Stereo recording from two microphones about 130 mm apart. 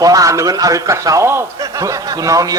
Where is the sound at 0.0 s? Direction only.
25° right (ahead or behind).